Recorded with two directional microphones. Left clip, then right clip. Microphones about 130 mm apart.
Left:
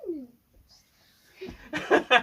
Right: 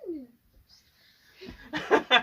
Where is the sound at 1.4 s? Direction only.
5° left (ahead or behind).